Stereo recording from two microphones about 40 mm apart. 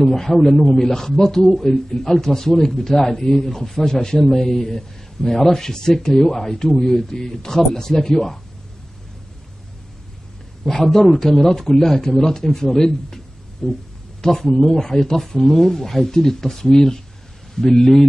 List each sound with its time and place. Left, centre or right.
0.0 s speech: centre
10.6 s a man's voice: centre